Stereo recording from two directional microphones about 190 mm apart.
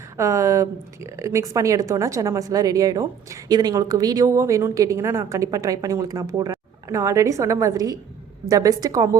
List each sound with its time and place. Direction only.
0.2 s a woman's voice: 15° right (ahead or behind)